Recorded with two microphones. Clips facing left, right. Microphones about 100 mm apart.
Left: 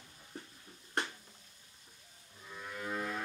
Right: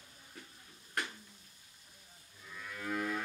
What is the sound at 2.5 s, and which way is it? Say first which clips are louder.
Livestock: right 1 dB; 30° left (ahead or behind).